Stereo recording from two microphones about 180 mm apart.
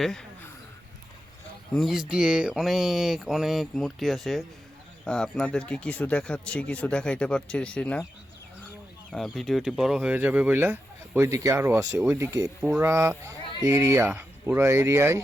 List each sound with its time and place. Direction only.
0.0 s mantra: 5° left (ahead or behind)
1.7 s mantra: centre (ahead or behind)
5.0 s speech: 5° left (ahead or behind)
9.1 s speech: centre (ahead or behind); by 15.2 s 15° right (ahead or behind)